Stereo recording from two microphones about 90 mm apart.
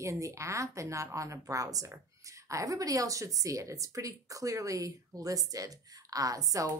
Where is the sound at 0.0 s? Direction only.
35° right (ahead or behind).